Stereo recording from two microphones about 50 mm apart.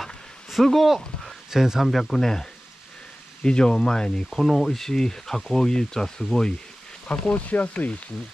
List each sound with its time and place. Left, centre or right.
0.0 s a sound: centre
3.4 s speech: centre
7.1 s speech: left